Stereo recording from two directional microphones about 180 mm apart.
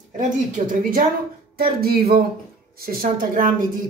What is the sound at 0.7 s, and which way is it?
Speech, 50° right (ahead or behind).